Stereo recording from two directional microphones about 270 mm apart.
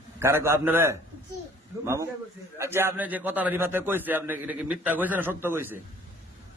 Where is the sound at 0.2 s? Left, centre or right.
Centre.